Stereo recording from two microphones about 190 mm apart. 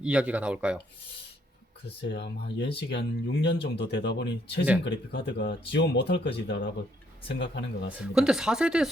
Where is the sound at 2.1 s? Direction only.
65° left (ahead or behind).